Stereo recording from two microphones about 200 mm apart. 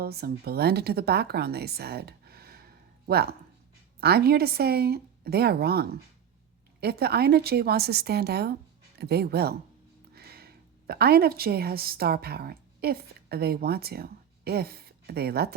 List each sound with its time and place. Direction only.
0.0 s a woman's voice: 50° right (ahead or behind)